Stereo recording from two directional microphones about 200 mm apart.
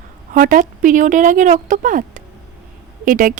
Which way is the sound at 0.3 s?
45° right (ahead or behind).